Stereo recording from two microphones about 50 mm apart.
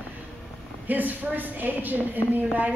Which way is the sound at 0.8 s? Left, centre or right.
Right.